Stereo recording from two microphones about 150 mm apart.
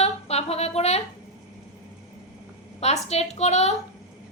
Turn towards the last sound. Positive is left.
turn(degrees=45)  # may be behind; listen again after turning